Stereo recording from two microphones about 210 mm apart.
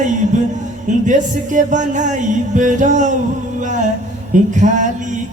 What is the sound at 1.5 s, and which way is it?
Music, 35° right (ahead or behind).